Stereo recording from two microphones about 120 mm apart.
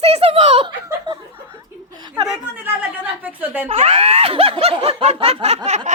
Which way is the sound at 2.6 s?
15° right (ahead or behind).